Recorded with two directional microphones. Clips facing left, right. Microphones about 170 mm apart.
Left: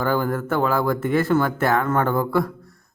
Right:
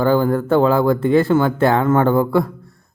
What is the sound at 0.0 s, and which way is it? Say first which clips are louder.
Speech: right 6 dB; 30° right (ahead or behind).